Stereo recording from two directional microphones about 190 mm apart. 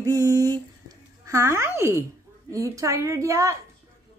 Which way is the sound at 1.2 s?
15° right (ahead or behind).